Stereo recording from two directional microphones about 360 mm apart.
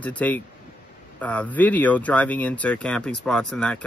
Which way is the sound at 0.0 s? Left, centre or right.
Centre.